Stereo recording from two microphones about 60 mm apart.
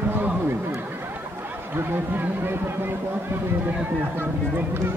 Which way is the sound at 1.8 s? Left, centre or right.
Right.